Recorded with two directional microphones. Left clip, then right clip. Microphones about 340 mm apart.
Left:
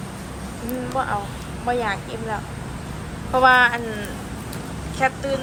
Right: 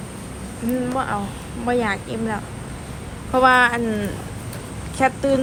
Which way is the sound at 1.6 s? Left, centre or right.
Right.